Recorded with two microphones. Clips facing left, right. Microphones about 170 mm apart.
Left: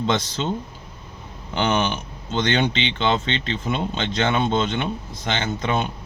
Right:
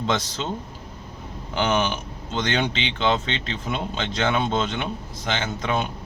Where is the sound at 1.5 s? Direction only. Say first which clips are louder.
Left 1 dB; 5° right (ahead or behind).